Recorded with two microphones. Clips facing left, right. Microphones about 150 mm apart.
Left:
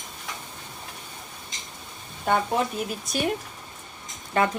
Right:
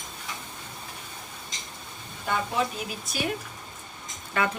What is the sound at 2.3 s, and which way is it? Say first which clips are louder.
Speech: left 4 dB; 50° left (ahead or behind).